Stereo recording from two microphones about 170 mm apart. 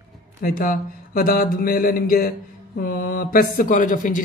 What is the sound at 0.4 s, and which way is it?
Speech, 60° left (ahead or behind).